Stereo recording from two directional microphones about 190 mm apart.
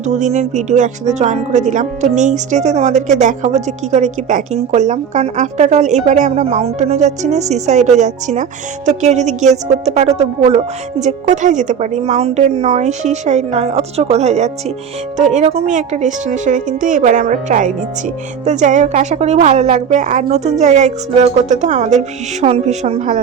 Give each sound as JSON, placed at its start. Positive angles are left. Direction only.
{"t": 0.0, "sound": "speech", "side_deg": -40}